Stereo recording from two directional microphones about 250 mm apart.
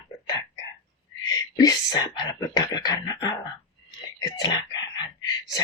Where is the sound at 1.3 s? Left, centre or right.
Centre.